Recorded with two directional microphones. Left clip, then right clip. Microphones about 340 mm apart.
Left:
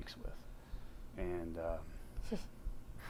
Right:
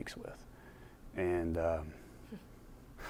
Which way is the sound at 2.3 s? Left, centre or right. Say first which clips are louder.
Left 9 dB; left.